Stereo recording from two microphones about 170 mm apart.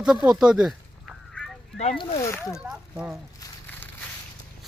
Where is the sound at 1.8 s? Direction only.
40° left (ahead or behind).